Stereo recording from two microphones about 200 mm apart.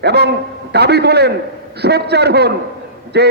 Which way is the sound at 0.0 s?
55° right (ahead or behind).